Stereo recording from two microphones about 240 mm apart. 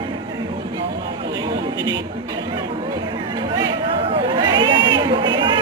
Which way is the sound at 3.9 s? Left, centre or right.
Right.